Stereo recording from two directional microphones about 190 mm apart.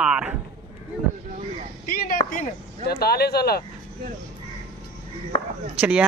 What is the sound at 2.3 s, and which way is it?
Speech, 50° left (ahead or behind).